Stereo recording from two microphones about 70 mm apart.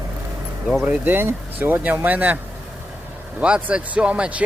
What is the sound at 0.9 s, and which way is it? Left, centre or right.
Speech, right.